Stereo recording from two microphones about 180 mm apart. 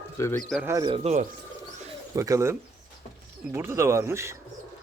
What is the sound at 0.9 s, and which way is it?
Speech, 35° right (ahead or behind).